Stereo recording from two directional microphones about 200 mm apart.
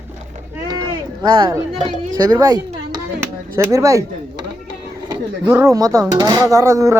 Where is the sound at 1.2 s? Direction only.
25° right (ahead or behind).